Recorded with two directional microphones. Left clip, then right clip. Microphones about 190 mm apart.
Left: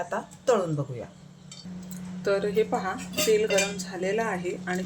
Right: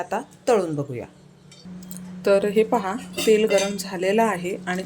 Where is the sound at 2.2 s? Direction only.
45° right (ahead or behind).